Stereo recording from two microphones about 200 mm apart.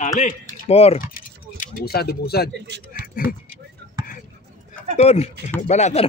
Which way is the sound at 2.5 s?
60° right (ahead or behind).